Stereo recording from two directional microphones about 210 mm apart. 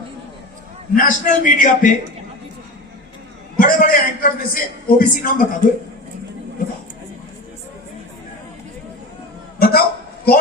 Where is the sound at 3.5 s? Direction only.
40° left (ahead or behind).